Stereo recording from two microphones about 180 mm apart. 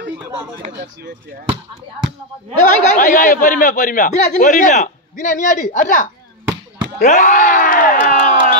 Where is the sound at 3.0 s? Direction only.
50° left (ahead or behind).